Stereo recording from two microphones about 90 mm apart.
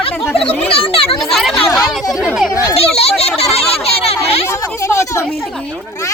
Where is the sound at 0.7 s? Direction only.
90° left.